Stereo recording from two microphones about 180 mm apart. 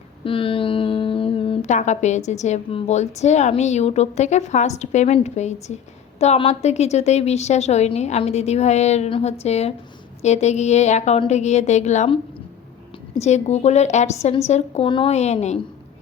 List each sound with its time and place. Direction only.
0.3 s speech: 30° left (ahead or behind)